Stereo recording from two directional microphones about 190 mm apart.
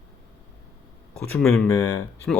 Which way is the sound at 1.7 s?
20° left (ahead or behind).